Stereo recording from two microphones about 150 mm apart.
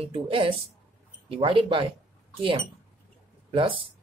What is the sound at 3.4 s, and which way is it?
Speech, 35° right (ahead or behind).